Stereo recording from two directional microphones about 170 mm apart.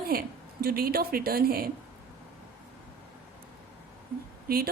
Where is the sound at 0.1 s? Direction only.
60° right (ahead or behind).